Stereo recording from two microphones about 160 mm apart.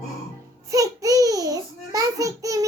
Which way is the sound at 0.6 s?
20° right (ahead or behind).